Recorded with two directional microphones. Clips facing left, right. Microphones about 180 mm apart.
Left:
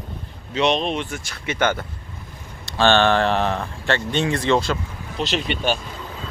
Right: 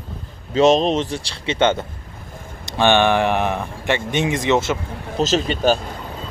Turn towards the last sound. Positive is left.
turn(degrees=-40)  # may be behind; listen again after turning